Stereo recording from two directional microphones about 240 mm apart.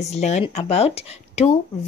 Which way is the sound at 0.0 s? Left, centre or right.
Left.